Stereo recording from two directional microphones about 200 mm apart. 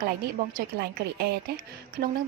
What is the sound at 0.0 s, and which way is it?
A woman's voice, 50° right (ahead or behind).